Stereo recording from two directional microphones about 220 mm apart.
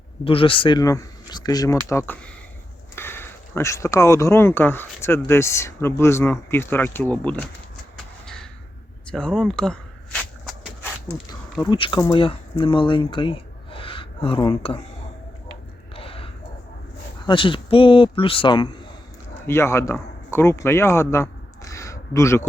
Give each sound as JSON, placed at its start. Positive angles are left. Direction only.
{"t": 0.3, "sound": "speech", "side_deg": 25}
{"t": 9.0, "sound": "a sound", "side_deg": 5}
{"t": 11.6, "sound": "speech", "side_deg": 20}
{"t": 16.0, "sound": "a sound", "side_deg": 25}
{"t": 17.2, "sound": "speech", "side_deg": 25}
{"t": 19.5, "sound": "a man's voice", "side_deg": 10}